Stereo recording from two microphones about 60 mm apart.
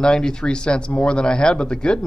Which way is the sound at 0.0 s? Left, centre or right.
Centre.